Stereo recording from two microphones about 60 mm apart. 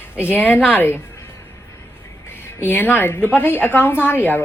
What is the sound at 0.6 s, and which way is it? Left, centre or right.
Speech, left.